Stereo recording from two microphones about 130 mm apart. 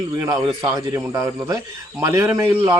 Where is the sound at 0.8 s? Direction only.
25° right (ahead or behind).